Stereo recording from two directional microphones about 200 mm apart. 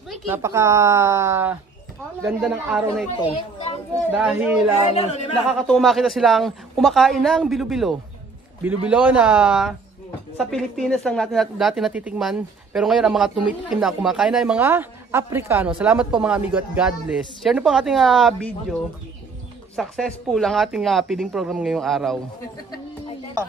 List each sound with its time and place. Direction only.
0.3 s a woman's voice: 15° right (ahead or behind)
3.1 s speech: 30° left (ahead or behind)
4.1 s a woman's voice: 5° right (ahead or behind)
4.9 s speech: 30° left (ahead or behind)
5.5 s a woman's voice: centre (ahead or behind)